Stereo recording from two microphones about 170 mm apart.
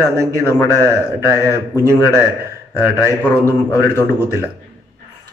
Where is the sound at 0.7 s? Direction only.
15° right (ahead or behind).